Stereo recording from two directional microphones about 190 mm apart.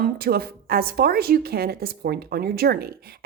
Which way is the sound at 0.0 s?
55° right (ahead or behind).